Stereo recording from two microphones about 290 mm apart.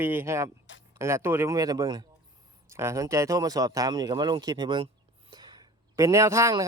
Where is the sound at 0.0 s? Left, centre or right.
Centre.